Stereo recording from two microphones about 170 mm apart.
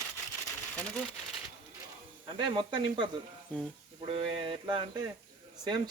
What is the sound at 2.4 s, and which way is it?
Speech, 25° right (ahead or behind).